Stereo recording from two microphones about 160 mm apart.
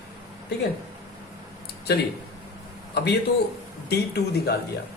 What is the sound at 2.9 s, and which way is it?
A man's voice, 90° left.